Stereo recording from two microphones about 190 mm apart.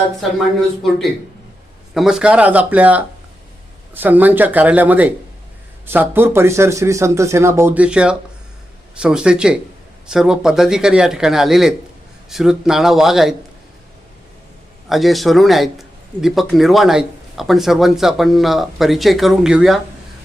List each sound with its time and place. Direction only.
1.9 s speech: centre (ahead or behind)
14.8 s speech: centre (ahead or behind)